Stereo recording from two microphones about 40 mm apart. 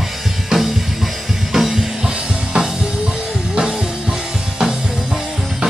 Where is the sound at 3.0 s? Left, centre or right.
Right.